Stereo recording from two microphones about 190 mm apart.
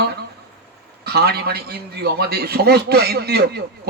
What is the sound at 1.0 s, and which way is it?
A man's voice, 55° right (ahead or behind).